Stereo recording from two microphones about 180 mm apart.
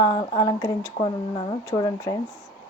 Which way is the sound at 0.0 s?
25° left (ahead or behind).